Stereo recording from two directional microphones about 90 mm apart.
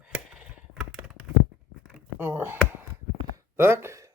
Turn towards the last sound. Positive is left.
turn(degrees=-25)  # may be behind; listen again after turning